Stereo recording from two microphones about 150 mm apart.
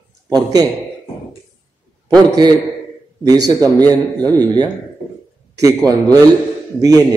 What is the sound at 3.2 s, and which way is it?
A man's voice, 25° right (ahead or behind).